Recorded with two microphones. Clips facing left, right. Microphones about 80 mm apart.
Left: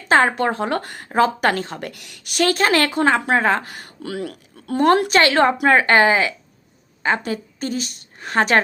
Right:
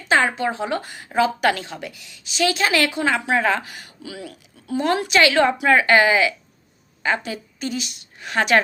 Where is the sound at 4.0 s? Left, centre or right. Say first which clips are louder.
Left 8 dB; left.